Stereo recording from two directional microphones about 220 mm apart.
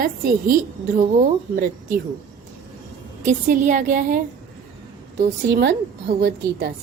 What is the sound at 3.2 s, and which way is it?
Speech, 35° right (ahead or behind).